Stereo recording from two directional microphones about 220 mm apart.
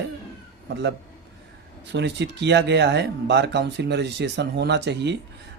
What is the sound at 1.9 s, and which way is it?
Speech, 50° right (ahead or behind).